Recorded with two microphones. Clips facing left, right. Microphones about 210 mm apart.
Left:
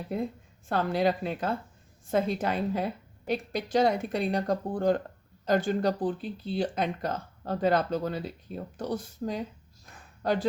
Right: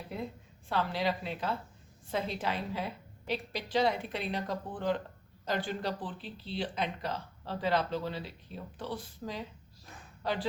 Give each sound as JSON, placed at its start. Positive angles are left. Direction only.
{"t": 0.7, "sound": "speech", "side_deg": 50}